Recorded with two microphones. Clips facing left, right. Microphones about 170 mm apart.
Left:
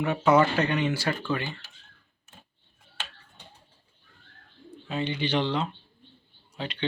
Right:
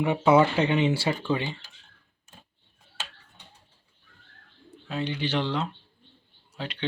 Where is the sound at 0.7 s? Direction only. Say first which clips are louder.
Right 3 dB; 20° right (ahead or behind).